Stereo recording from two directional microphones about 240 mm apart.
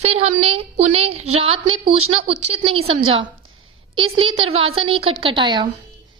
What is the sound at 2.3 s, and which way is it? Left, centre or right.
Speech, right.